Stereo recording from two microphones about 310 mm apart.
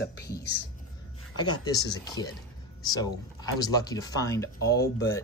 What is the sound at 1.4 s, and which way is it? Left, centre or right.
Speech, centre.